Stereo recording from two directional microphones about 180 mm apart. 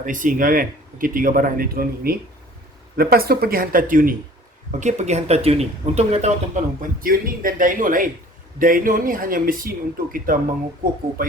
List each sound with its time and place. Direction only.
0.0 s speech: 45° right (ahead or behind)
7.0 s speech: 50° right (ahead or behind)